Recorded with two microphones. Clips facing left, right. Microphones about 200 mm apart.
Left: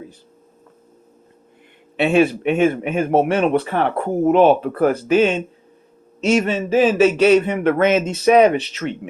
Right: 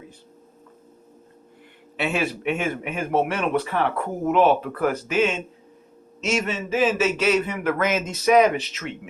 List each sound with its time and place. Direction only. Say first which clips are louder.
2.0 s a man's voice: left 10 dB; 30° left (ahead or behind)